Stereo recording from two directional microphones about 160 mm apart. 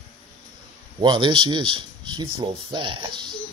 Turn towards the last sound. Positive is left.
turn(degrees=-30)  # may be behind; listen again after turning